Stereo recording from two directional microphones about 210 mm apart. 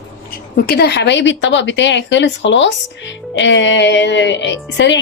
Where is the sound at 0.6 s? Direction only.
50° left (ahead or behind).